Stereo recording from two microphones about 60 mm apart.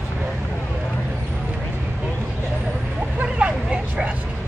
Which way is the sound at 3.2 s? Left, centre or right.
Centre.